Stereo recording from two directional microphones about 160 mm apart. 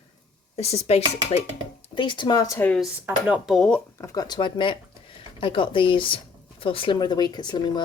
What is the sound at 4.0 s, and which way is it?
Speech, 20° left (ahead or behind).